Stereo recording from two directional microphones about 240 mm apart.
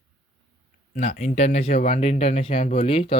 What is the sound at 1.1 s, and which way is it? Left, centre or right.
Speech, left.